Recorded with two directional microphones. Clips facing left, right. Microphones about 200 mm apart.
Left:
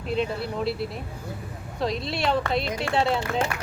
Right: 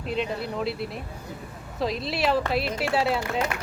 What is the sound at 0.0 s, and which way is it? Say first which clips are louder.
Speech: left 2 dB; centre (ahead or behind).